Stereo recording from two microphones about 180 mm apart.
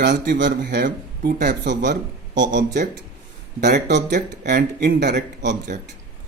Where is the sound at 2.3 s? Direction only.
90° right.